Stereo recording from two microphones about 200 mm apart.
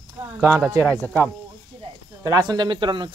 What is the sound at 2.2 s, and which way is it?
Speech, 20° right (ahead or behind).